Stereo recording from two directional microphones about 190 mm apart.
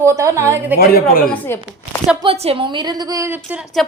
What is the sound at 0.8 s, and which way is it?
Speech, 50° left (ahead or behind).